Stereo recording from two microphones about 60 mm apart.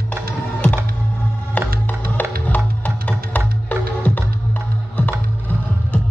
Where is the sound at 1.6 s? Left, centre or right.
Left.